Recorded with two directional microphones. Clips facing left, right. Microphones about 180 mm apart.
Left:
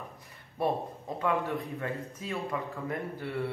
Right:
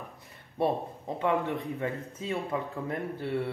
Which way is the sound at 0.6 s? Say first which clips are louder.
Right 2 dB; 25° right (ahead or behind).